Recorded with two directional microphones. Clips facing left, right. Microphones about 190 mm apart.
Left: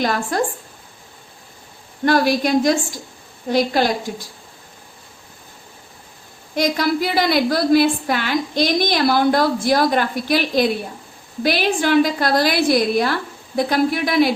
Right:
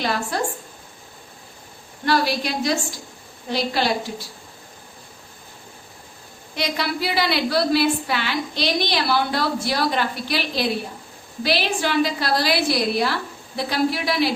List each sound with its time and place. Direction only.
0.0 s a woman's voice: 50° left (ahead or behind)
2.0 s a woman's voice: 50° left (ahead or behind)
6.6 s a woman's voice: 45° left (ahead or behind)